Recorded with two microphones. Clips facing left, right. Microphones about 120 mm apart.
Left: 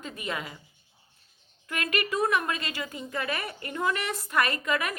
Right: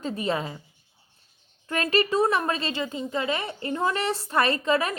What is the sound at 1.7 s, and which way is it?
A woman's voice, 30° right (ahead or behind).